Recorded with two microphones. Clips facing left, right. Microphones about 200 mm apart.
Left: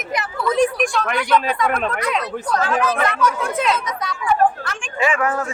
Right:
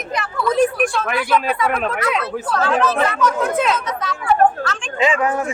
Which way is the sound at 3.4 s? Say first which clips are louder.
Right 2 dB; centre (ahead or behind).